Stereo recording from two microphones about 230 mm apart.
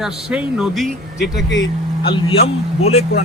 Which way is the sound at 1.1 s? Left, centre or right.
Left.